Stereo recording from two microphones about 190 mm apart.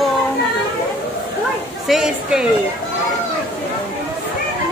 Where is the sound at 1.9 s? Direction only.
Centre (ahead or behind).